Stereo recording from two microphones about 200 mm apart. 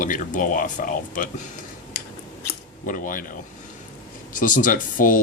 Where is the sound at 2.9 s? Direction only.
40° left (ahead or behind).